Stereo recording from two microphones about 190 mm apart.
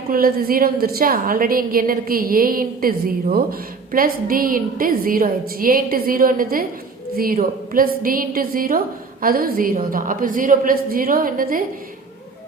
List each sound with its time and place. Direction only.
0.1 s a woman's voice: 50° right (ahead or behind)